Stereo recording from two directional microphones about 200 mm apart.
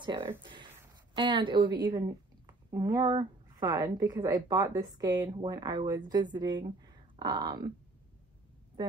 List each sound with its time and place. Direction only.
0.0 s speech: 25° right (ahead or behind)